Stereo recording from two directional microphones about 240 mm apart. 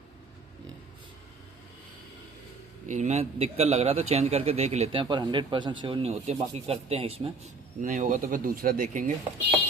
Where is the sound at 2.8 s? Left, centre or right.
Right.